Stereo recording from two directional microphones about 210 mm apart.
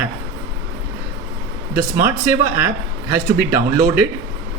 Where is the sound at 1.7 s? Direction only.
10° right (ahead or behind).